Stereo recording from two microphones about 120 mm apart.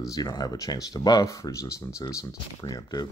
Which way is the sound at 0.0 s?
30° left (ahead or behind).